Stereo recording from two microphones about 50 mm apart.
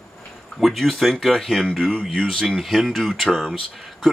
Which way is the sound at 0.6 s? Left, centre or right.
Centre.